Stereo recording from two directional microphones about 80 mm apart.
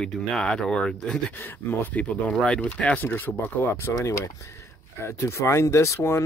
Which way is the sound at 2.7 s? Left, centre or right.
Left.